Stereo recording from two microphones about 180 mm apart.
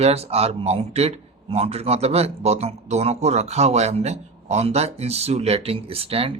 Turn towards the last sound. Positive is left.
turn(degrees=-30)  # may be behind; listen again after turning